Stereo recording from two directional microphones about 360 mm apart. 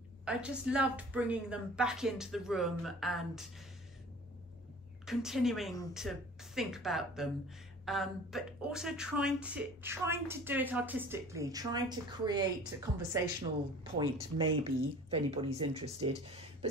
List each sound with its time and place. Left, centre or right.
0.2 s speech: centre
5.0 s speech: centre